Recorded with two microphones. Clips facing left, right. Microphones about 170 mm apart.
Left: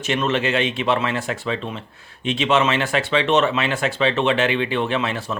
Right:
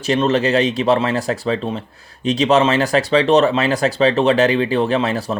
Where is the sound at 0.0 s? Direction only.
35° right (ahead or behind).